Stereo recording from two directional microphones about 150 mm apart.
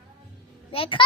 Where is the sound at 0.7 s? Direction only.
35° left (ahead or behind).